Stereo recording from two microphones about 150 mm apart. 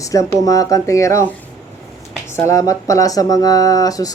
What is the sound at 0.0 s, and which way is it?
Speech, 20° left (ahead or behind).